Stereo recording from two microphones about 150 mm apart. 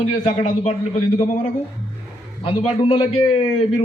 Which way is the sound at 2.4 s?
40° left (ahead or behind).